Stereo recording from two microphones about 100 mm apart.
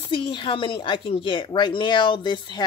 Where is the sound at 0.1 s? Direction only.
55° left (ahead or behind).